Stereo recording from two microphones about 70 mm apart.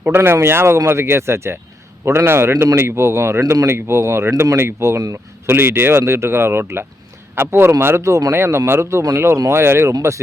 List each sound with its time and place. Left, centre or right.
0.2 s speech: right
4.9 s a man's voice: right
5.5 s speech: right